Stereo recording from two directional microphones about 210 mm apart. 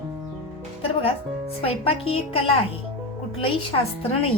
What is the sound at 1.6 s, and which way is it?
Speech, 25° left (ahead or behind).